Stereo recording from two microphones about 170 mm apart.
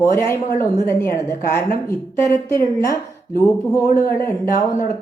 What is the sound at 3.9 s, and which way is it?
Speech, 15° left (ahead or behind).